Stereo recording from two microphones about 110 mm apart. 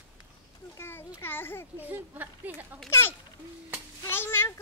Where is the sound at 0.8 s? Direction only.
25° left (ahead or behind).